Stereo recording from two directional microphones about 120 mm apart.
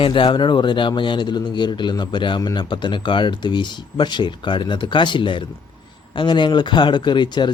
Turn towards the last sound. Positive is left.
turn(degrees=40)  # may be behind; listen again after turning